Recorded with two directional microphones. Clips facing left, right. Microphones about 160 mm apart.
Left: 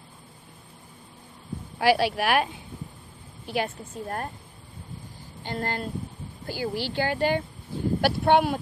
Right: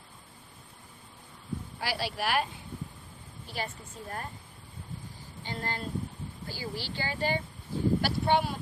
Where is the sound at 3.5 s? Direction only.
55° left (ahead or behind).